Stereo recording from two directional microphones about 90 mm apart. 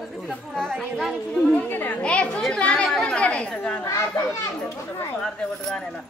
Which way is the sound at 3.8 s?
35° left (ahead or behind).